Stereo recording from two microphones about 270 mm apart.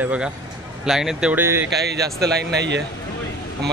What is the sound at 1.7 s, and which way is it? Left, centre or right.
Speech, right.